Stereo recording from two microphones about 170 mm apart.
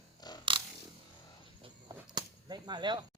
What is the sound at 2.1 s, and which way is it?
Arrow, 25° right (ahead or behind).